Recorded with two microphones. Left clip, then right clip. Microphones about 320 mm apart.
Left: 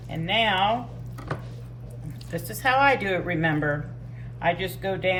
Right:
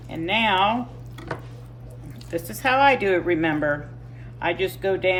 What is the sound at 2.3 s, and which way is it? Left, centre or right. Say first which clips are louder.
Speech: right 1 dB; centre.